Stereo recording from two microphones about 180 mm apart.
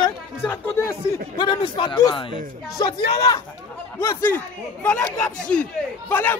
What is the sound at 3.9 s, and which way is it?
Speech, 10° left (ahead or behind).